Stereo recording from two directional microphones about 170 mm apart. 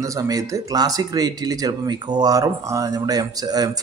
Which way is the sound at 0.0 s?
20° right (ahead or behind).